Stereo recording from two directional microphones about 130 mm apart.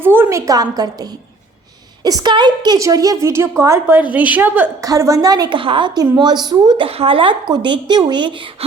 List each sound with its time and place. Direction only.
0.0 s a woman's voice: 15° right (ahead or behind)
2.0 s a woman's voice: 30° right (ahead or behind); by 4.7 s 15° right (ahead or behind)
4.8 s a woman's voice: 25° right (ahead or behind)
6.8 s speech: 45° right (ahead or behind)